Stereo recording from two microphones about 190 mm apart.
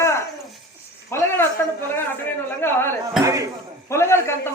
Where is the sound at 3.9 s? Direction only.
15° left (ahead or behind).